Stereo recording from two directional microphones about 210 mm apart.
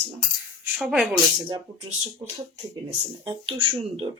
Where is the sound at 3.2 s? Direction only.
25° right (ahead or behind).